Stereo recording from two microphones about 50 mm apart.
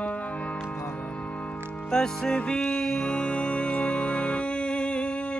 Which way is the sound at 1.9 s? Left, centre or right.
Centre.